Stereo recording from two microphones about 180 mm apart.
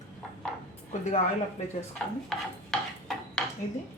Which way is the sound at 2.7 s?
5° left (ahead or behind).